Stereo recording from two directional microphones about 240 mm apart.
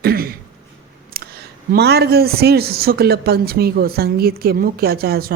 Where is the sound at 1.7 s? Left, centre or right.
Right.